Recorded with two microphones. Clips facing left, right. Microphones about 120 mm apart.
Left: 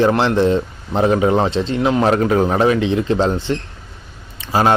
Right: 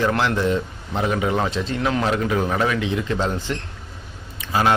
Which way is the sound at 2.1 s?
40° left (ahead or behind).